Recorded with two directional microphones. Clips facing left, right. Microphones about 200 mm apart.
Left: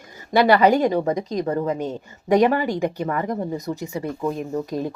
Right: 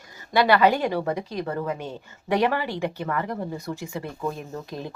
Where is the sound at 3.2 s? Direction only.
15° left (ahead or behind).